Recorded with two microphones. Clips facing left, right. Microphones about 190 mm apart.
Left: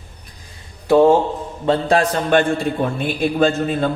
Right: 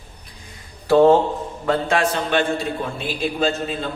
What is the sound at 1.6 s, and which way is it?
A man's voice, 35° left (ahead or behind).